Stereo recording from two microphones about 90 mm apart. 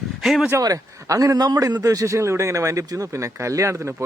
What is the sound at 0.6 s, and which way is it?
A man's voice, 40° right (ahead or behind).